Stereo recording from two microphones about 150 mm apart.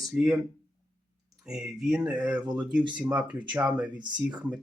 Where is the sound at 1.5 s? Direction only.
Centre (ahead or behind).